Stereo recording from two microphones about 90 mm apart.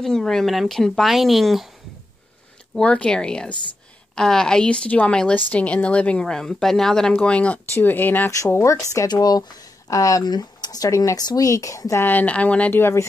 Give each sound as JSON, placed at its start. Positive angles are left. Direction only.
{"t": 0.0, "sound": "speech", "side_deg": 5}
{"t": 2.7, "sound": "a woman's voice", "side_deg": 10}
{"t": 8.3, "sound": "speech", "side_deg": 35}
{"t": 9.0, "sound": "speech", "side_deg": 50}
{"t": 10.2, "sound": "speech", "side_deg": 50}